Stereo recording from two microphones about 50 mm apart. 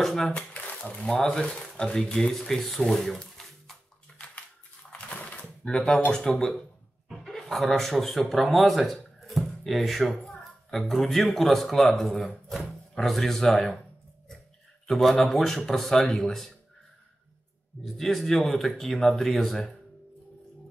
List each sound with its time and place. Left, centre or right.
0.0 s speech: centre
0.3 s a sound: left
1.0 s speech: centre
3.4 s music: centre
4.9 s a sound: left
6.0 s speech: centre
7.1 s chuckle: centre
7.7 s speech: centre
14.9 s speech: centre
17.8 s speech: centre